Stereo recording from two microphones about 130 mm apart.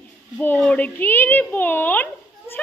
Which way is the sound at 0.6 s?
10° left (ahead or behind).